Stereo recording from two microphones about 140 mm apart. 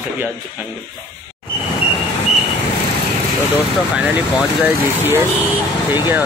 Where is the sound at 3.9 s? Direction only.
10° right (ahead or behind).